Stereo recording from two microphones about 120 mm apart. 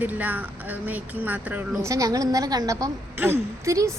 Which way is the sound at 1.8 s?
30° right (ahead or behind).